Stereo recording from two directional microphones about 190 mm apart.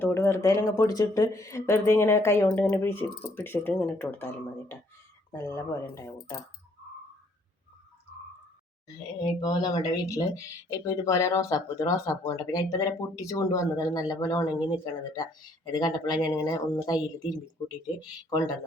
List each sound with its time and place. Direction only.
0.0 s speech: 15° left (ahead or behind)
5.3 s speech: 15° left (ahead or behind)
9.2 s speech: 20° left (ahead or behind)